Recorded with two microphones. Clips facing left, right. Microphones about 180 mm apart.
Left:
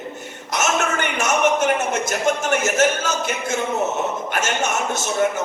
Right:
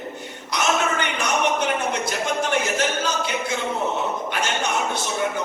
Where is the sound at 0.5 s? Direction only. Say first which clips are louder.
Left 1 dB; 45° left (ahead or behind).